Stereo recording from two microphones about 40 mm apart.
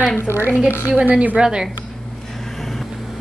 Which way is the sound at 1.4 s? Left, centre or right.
Right.